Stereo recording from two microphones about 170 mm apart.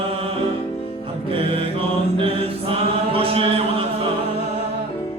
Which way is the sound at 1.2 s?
35° right (ahead or behind).